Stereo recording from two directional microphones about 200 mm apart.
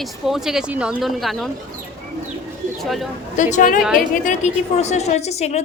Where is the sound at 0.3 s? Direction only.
Centre (ahead or behind).